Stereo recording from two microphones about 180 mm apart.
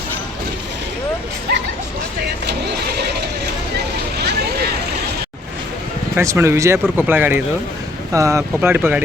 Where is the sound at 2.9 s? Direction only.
65° right (ahead or behind).